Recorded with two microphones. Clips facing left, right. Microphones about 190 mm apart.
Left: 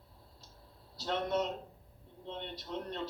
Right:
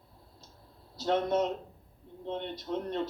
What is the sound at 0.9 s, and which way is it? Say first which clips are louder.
A man's voice: right 5 dB; 50° right (ahead or behind).